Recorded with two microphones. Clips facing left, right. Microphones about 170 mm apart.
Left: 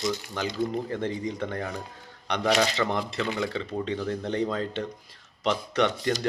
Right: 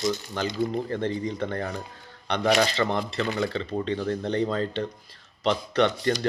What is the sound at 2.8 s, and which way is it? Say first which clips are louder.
Speech: right 2 dB; centre (ahead or behind).